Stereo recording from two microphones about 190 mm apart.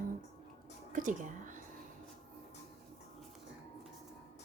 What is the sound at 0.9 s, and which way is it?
Speech, 45° right (ahead or behind).